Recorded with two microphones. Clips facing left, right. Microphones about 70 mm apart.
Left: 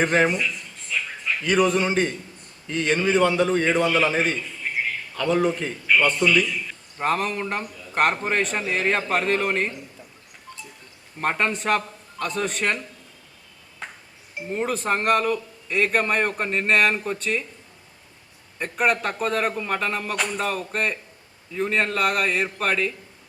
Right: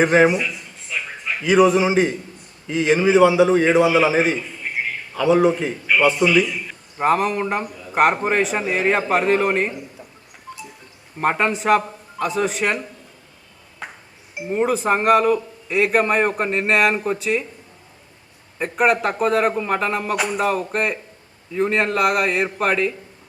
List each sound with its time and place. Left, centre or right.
0.0 s a sound: centre
2.6 s a man's voice: centre
11.2 s a man's voice: centre
11.8 s a sound: centre
12.3 s a man's voice: centre
13.8 s music: centre
14.3 s a man's voice: centre
18.6 s a man's voice: centre